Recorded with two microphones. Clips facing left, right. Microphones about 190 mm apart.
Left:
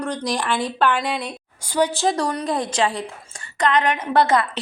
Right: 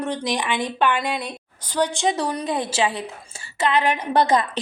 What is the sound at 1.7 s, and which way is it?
A woman's voice, 10° left (ahead or behind).